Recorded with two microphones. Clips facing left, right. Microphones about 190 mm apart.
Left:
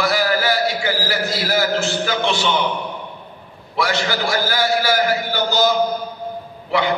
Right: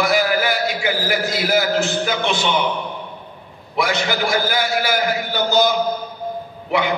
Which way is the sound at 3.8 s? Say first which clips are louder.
Right 1 dB; 20° right (ahead or behind).